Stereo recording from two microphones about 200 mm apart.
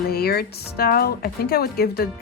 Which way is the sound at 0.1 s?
50° left (ahead or behind).